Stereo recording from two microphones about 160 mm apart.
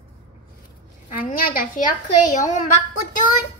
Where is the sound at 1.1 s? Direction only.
60° left (ahead or behind).